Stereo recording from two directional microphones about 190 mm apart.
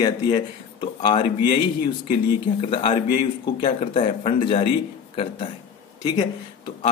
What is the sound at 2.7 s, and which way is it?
Speech, 25° left (ahead or behind).